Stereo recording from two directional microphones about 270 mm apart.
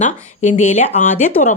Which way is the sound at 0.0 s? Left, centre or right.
Left.